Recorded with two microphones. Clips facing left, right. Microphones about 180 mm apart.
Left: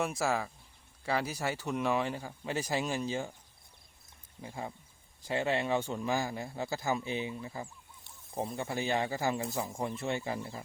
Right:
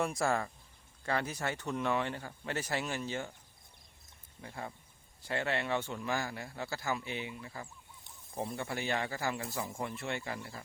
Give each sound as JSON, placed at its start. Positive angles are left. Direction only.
{"t": 0.0, "sound": "speech", "side_deg": 5}
{"t": 4.4, "sound": "speech", "side_deg": 15}